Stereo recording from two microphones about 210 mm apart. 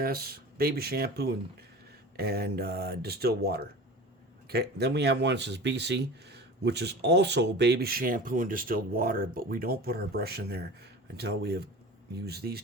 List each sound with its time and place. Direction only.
0.0 s speech: 45° right (ahead or behind)